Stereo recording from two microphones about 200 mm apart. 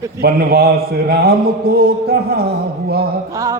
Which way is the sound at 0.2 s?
50° right (ahead or behind).